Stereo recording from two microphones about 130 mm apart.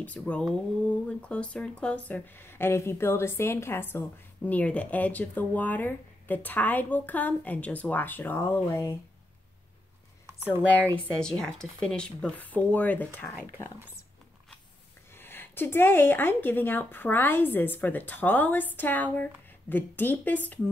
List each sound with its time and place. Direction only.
0.0 s speech: 10° left (ahead or behind)
10.2 s a sound: 20° right (ahead or behind)
11.1 s speech: 5° left (ahead or behind)
13.3 s speech: 15° right (ahead or behind)
15.1 s speech: 15° left (ahead or behind)